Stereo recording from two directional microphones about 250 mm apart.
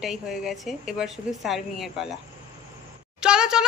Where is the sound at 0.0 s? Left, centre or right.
Centre.